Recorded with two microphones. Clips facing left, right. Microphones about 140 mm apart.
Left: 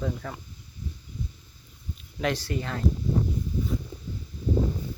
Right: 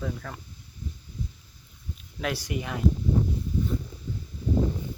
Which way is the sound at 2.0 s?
Centre (ahead or behind).